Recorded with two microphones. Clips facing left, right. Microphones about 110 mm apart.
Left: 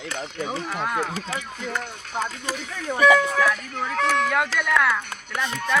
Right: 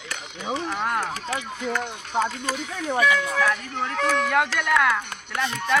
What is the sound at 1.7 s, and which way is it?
Speech, 20° right (ahead or behind).